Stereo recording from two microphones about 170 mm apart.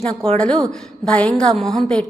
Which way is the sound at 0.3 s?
5° left (ahead or behind).